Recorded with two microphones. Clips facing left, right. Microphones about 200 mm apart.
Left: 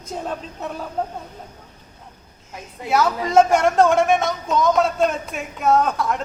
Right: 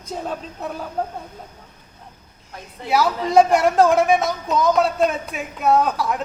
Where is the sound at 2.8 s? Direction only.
Centre (ahead or behind).